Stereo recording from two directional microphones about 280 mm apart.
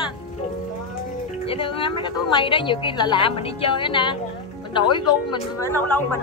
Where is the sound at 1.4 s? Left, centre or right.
Centre.